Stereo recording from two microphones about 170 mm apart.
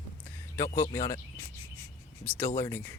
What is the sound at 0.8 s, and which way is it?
Speech, 15° left (ahead or behind).